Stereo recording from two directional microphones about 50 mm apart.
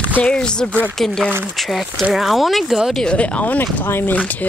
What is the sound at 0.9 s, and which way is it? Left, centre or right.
Speech, centre.